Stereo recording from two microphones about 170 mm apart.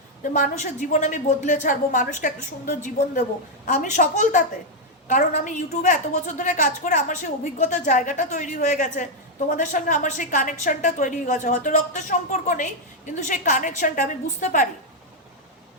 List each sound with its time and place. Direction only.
0.2 s a woman's voice: 45° left (ahead or behind)